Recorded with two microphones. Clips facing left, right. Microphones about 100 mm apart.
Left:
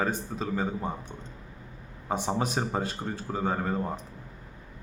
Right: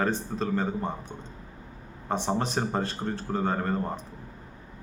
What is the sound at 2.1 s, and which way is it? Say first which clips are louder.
Speech: right 1 dB; 5° left (ahead or behind).